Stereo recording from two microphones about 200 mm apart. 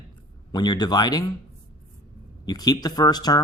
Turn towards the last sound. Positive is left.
turn(degrees=20)  # may be behind; listen again after turning